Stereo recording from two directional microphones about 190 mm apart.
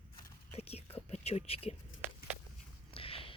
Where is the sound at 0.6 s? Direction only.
30° left (ahead or behind).